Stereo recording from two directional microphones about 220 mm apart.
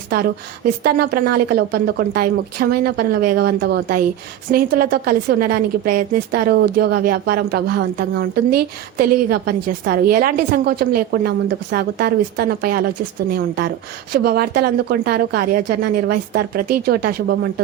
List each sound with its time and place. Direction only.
0.1 s a woman's voice: 45° right (ahead or behind)
14.1 s a woman's voice: 45° right (ahead or behind)